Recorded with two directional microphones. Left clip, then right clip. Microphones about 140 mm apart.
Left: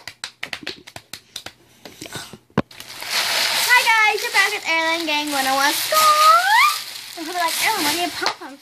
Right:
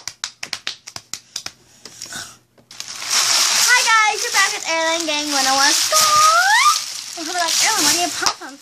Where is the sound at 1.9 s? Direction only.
35° right (ahead or behind).